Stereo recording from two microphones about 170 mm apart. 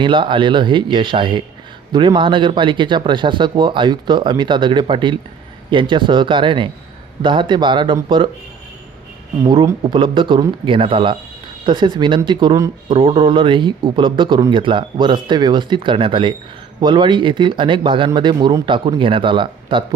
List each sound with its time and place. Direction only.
0.0 s speech: 30° right (ahead or behind)
9.4 s speech: 20° right (ahead or behind)